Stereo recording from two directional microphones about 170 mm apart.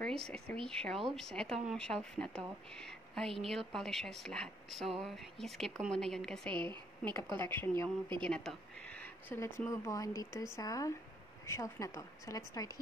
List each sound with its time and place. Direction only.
0.0 s a woman's voice: 5° left (ahead or behind); by 12.7 s 20° left (ahead or behind)